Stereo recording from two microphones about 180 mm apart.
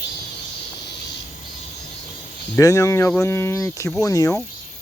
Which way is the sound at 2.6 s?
15° left (ahead or behind).